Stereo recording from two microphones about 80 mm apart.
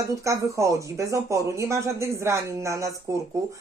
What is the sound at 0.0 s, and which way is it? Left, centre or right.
A woman's voice, right.